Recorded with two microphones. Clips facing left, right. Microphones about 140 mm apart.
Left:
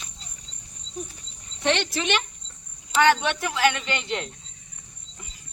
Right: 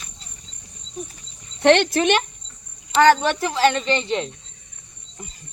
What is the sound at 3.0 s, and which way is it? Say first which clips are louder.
Speech: right 5 dB; 40° right (ahead or behind).